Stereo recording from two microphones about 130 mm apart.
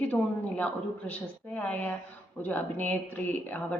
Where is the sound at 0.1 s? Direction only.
10° left (ahead or behind).